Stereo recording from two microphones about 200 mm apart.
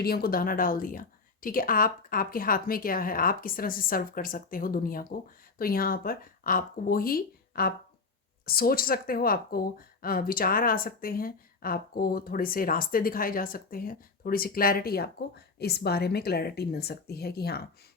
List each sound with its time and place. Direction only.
0.0 s speech: 50° left (ahead or behind)